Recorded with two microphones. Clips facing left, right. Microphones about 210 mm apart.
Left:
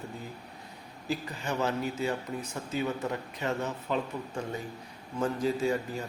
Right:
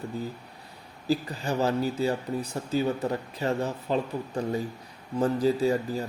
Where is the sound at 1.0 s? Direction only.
35° right (ahead or behind).